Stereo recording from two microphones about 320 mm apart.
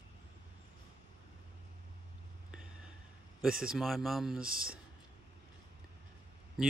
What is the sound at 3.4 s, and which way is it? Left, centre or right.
Speech, centre.